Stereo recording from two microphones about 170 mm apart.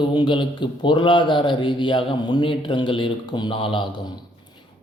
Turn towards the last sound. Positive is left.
turn(degrees=30)  # may be behind; listen again after turning